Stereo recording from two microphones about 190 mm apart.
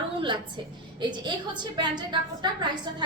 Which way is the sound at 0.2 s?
25° right (ahead or behind).